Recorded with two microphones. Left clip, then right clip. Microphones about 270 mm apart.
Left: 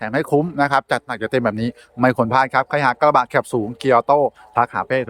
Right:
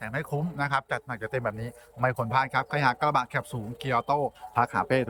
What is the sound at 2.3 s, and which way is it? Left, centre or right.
Speech, centre.